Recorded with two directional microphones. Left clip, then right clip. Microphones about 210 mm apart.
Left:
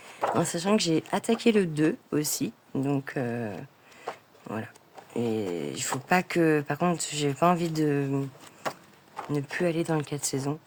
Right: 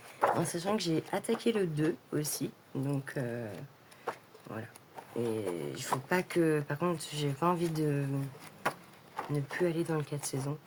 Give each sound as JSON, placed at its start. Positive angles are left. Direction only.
{"t": 0.3, "sound": "speech", "side_deg": 55}
{"t": 9.3, "sound": "speech", "side_deg": 50}